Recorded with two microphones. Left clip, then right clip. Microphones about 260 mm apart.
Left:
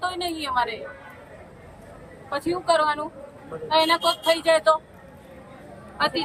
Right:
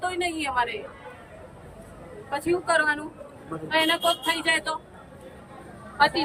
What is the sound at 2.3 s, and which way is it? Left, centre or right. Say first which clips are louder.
Speech: left 1 dB; centre.